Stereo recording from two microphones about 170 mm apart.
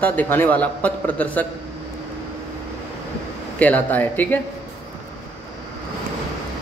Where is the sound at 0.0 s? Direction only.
10° left (ahead or behind).